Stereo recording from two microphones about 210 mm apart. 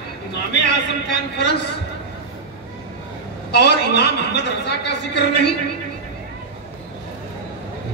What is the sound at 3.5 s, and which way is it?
A man's voice, 50° left (ahead or behind).